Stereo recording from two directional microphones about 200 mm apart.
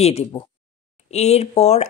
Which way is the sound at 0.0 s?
30° left (ahead or behind).